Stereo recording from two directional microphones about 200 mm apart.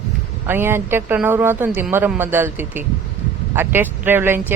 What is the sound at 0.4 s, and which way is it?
Speech, 10° right (ahead or behind).